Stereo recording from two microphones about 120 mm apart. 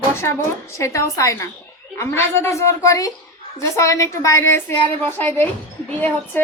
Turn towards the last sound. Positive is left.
turn(degrees=15)  # may be behind; listen again after turning